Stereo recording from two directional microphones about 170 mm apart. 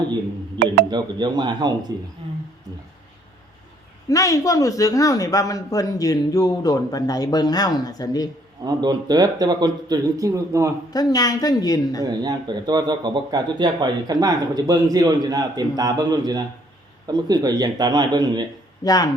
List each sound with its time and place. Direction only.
0.9 s speech: 25° right (ahead or behind)
4.1 s speech: 20° left (ahead or behind)
8.6 s speech: 25° right (ahead or behind)
10.9 s speech: 20° left (ahead or behind)
12.0 s speech: 25° right (ahead or behind)
18.9 s speech: 20° left (ahead or behind)